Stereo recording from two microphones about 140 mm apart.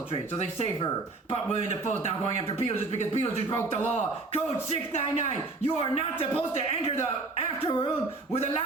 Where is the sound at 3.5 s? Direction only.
15° left (ahead or behind).